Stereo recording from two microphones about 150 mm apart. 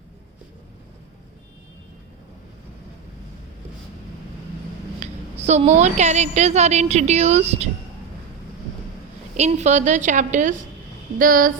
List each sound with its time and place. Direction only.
4.9 s a woman's voice: 50° right (ahead or behind)
9.4 s a woman's voice: 50° right (ahead or behind)
11.2 s speech: 65° right (ahead or behind)